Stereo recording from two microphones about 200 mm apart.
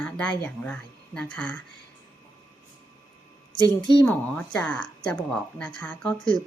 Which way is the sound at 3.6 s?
25° left (ahead or behind).